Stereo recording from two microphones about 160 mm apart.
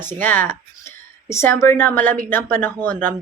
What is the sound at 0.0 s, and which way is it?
Speech, 10° left (ahead or behind).